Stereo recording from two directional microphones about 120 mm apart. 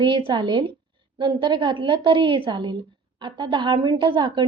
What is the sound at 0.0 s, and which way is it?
A woman's voice, 45° right (ahead or behind).